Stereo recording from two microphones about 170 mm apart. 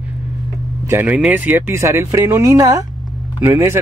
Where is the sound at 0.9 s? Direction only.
10° right (ahead or behind).